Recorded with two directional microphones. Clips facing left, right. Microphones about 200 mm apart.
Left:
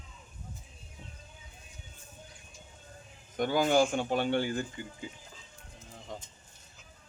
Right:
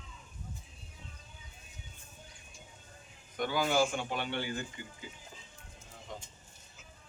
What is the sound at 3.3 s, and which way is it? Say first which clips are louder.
Speech: left 5 dB; 45° left (ahead or behind).